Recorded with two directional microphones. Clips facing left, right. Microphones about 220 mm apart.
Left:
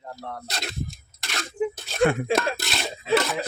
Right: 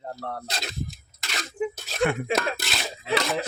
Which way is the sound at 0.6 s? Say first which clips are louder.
Left 1 dB; centre (ahead or behind).